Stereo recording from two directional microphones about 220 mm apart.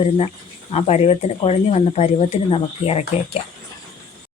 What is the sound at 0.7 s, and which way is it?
Speech, 30° left (ahead or behind).